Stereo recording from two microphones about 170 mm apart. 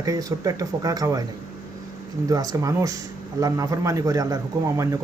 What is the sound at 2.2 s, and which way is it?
Speech, 20° right (ahead or behind).